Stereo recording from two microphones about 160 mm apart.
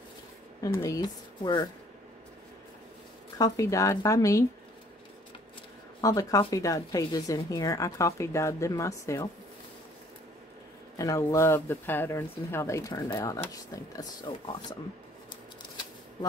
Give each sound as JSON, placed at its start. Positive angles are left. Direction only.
{"t": 0.8, "sound": "speech", "side_deg": 25}
{"t": 3.3, "sound": "speech", "side_deg": 20}
{"t": 5.9, "sound": "speech", "side_deg": 20}
{"t": 11.0, "sound": "speech", "side_deg": 20}